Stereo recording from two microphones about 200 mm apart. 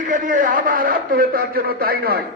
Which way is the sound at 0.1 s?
40° right (ahead or behind).